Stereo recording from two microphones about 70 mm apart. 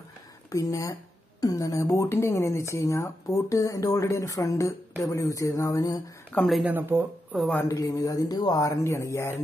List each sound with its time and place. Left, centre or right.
0.5 s speech: left
6.6 s speech: right
7.6 s speech: left
8.5 s speech: left